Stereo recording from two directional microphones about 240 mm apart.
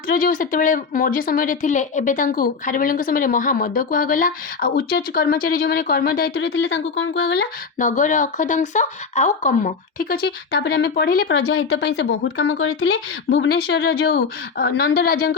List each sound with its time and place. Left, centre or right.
0.1 s speech: left
7.8 s speech: left